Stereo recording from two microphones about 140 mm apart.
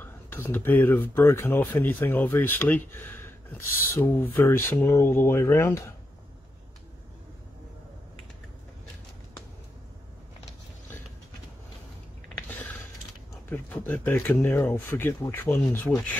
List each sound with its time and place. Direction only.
0.0 s speech: 15° left (ahead or behind)
13.5 s speech: 15° left (ahead or behind)